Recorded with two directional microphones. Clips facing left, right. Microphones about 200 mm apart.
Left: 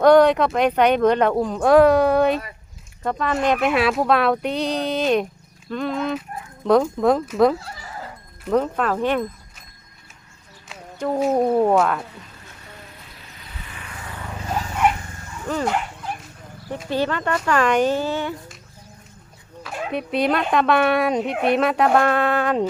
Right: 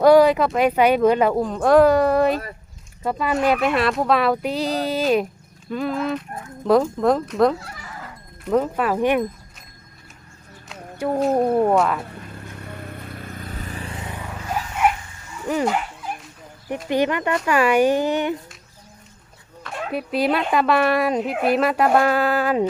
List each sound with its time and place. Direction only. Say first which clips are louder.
0.0 s speech: even; 5° right (ahead or behind)
10.9 s speech: right 1 dB; 10° right (ahead or behind)
11.2 s speech: even; centre (ahead or behind)
12.2 s vehicle: right 8 dB; 55° right (ahead or behind); by 14.3 s 20° right (ahead or behind)
15.5 s speech: right 2 dB; 10° right (ahead or behind)
16.9 s speech: right 2 dB; 15° right (ahead or behind)
19.6 s speech: even; centre (ahead or behind)